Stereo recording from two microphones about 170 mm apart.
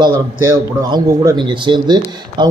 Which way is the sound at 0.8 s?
25° right (ahead or behind).